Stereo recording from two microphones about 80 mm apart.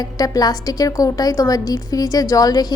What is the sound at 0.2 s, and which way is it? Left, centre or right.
Speech, left.